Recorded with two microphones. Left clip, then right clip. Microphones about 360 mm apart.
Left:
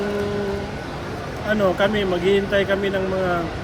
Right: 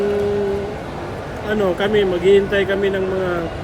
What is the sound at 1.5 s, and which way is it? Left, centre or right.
Speech, centre.